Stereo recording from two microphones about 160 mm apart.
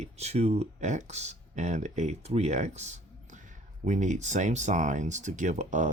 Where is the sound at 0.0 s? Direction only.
40° right (ahead or behind).